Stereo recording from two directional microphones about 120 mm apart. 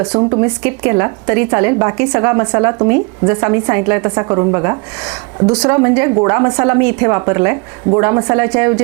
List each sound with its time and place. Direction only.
0.0 s a woman's voice: 30° right (ahead or behind)